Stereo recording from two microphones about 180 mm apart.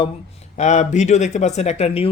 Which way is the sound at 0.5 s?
40° left (ahead or behind).